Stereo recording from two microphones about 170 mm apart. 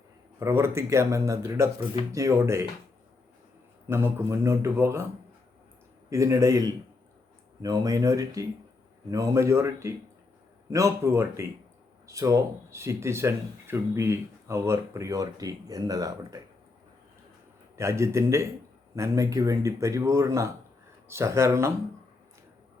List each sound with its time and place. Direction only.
0.3 s speech: 15° right (ahead or behind)
3.8 s speech: 15° right (ahead or behind)
6.1 s speech: 20° right (ahead or behind)
17.7 s speech: 15° right (ahead or behind)